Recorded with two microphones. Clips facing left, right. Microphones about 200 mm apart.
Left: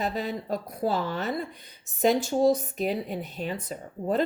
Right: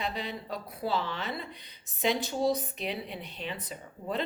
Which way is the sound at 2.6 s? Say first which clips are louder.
Left 7 dB; 45° left (ahead or behind).